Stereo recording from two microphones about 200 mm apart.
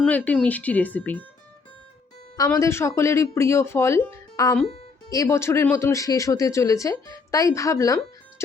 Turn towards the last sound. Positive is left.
turn(degrees=15)  # may be behind; listen again after turning